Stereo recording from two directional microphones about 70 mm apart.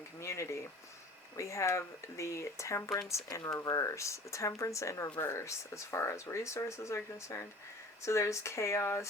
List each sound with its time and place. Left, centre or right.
0.2 s speech: left